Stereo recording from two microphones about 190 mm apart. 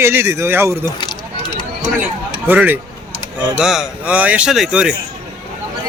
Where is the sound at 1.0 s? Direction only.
25° left (ahead or behind).